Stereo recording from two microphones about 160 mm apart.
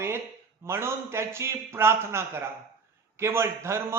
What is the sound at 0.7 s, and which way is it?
A man's voice, 15° right (ahead or behind).